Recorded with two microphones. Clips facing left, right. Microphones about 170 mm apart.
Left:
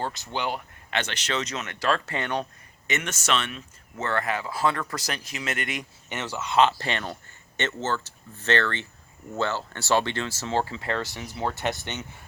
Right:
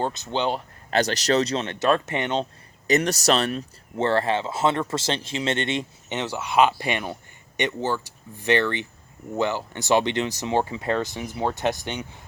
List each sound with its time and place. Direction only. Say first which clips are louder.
0.0 s speech: right 5 dB; 20° right (ahead or behind)
0.9 s speech: right 9 dB; 35° right (ahead or behind); by 2.5 s 20° right (ahead or behind)
2.8 s speech: right 9 dB; 35° right (ahead or behind); by 12.0 s 15° right (ahead or behind)